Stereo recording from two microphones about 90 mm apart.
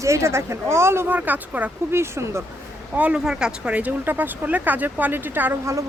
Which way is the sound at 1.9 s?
30° right (ahead or behind).